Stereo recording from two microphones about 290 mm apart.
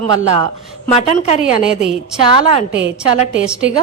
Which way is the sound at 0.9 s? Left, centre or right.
Left.